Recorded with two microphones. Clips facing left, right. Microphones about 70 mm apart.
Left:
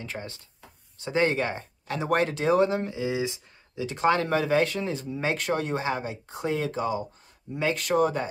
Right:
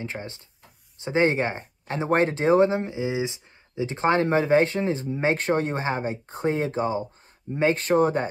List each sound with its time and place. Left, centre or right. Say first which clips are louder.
0.0 s speech: right 3 dB; right